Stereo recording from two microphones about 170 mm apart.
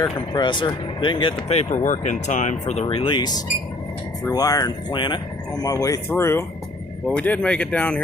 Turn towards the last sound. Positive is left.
turn(degrees=10)  # may be behind; listen again after turning